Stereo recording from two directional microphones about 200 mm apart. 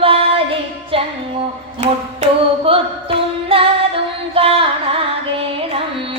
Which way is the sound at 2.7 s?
25° right (ahead or behind).